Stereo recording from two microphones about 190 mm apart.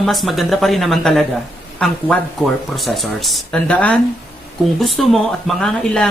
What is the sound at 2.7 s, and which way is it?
Speech, centre (ahead or behind).